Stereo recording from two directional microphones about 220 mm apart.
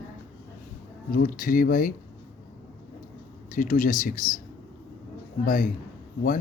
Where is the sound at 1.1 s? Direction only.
40° left (ahead or behind).